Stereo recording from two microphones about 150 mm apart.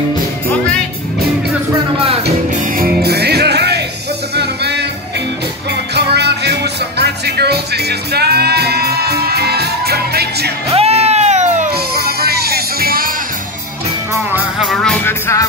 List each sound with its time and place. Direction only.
2.8 s music: 90° right
5.9 s music: 90° right
10.7 s music: 45° right (ahead or behind)
11.7 s music: 90° right
14.6 s music: centre (ahead or behind)
15.0 s music: 15° left (ahead or behind)